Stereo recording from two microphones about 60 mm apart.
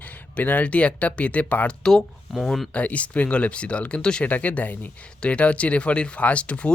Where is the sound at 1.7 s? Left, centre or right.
Centre.